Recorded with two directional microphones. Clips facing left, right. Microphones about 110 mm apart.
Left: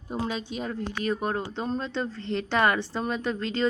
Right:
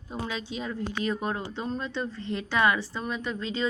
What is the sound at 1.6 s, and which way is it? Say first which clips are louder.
Speech: left 2 dB; 30° left (ahead or behind).